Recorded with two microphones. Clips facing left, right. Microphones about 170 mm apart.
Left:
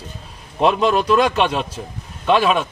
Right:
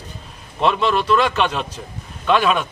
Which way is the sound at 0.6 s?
40° left (ahead or behind).